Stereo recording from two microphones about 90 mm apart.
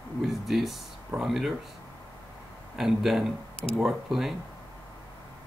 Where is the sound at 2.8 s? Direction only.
5° right (ahead or behind).